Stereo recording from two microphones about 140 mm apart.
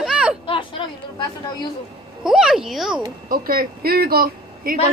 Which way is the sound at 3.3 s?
90° right.